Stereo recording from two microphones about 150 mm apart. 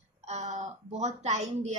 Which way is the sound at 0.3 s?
50° right (ahead or behind).